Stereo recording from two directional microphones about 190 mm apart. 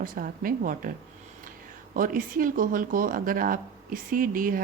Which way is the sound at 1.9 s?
45° right (ahead or behind).